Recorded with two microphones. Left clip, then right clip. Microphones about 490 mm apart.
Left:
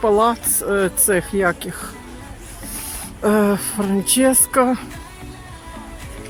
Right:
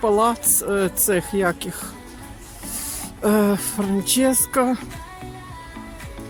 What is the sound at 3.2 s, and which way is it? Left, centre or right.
Speech, right.